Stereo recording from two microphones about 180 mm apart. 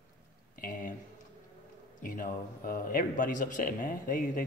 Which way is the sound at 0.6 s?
50° left (ahead or behind).